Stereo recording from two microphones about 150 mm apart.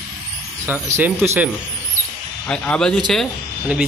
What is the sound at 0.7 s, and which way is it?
Speech, 15° right (ahead or behind).